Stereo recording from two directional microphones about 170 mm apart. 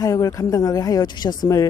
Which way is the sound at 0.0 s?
20° left (ahead or behind).